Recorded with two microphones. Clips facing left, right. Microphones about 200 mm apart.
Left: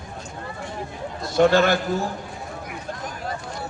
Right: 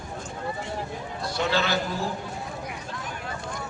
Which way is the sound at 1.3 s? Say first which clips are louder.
Left 9 dB; 50° left (ahead or behind).